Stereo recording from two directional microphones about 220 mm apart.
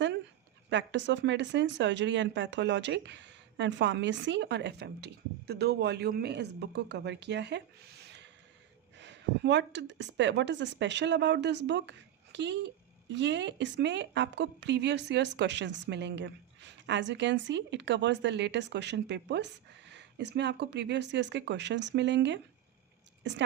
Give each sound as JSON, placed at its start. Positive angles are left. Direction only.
{"t": 0.7, "sound": "speech", "side_deg": -55}